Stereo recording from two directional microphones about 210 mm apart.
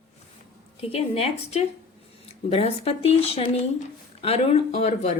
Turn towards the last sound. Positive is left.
turn(degrees=30)  # may be behind; listen again after turning